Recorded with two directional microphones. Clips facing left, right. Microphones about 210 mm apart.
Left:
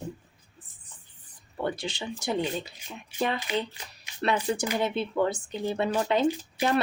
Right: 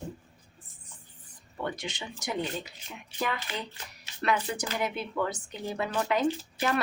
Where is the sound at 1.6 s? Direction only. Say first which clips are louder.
Left 4 dB; 30° left (ahead or behind).